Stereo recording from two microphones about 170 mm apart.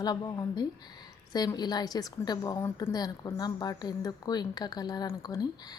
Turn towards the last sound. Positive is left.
turn(degrees=25)  # may be behind; listen again after turning